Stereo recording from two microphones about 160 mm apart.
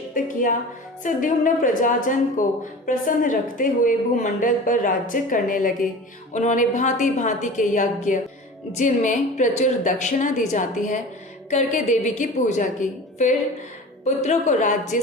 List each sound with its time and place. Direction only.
0.1 s a woman's voice: 55° left (ahead or behind)